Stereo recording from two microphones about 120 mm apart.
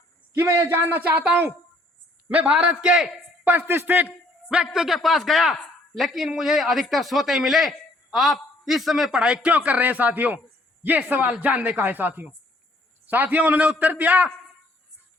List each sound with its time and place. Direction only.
0.3 s a man's voice: 25° right (ahead or behind); by 3.5 s 5° right (ahead or behind)
3.5 s speech: 15° right (ahead or behind)
4.4 s a man's voice: 5° right (ahead or behind)